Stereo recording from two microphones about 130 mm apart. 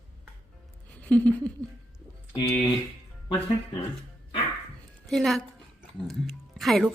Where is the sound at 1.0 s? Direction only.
10° left (ahead or behind).